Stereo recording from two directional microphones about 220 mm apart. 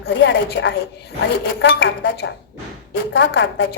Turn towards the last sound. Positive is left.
turn(degrees=55)  # may be behind; listen again after turning